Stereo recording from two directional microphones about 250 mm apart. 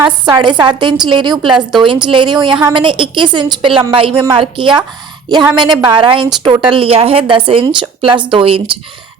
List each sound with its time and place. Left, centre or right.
0.3 s a woman's voice: centre